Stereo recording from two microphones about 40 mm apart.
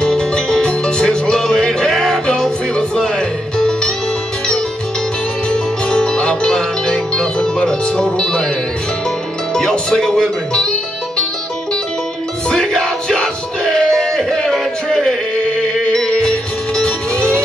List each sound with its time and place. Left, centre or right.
0.0 s music: centre
1.9 s music: centre
2.2 s music: left
5.5 s music: centre
9.5 s speech: centre
12.4 s music: centre
15.5 s music: centre